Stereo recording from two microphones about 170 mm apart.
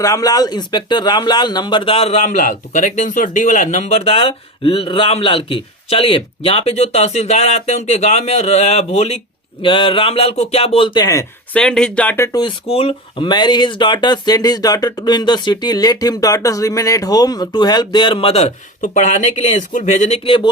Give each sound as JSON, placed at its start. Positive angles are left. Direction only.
{"t": 0.0, "sound": "speech", "side_deg": 20}
{"t": 11.5, "sound": "speech", "side_deg": 5}